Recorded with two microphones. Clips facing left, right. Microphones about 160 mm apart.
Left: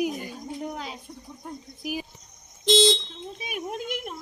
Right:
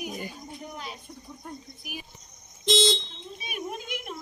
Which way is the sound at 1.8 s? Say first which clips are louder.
Left 10 dB; 90° left.